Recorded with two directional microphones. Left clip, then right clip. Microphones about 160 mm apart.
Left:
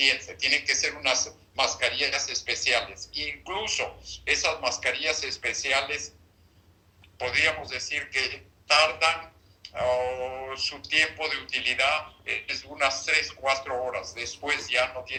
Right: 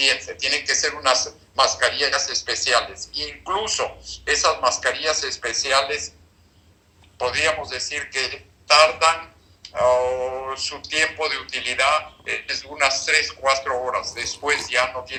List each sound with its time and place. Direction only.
0.0 s speech: 20° right (ahead or behind)
7.2 s speech: 20° right (ahead or behind)